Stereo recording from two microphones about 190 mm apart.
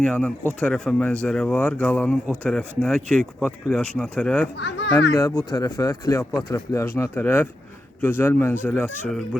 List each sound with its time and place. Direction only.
0.0 s speech: 5° left (ahead or behind)
4.5 s speech: 70° left (ahead or behind)
5.1 s speech: 15° left (ahead or behind)